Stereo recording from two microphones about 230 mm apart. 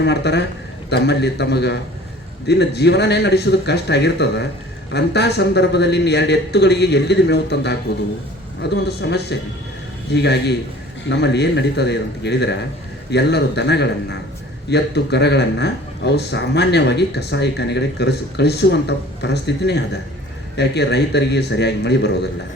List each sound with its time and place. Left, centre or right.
0.0 s speech: left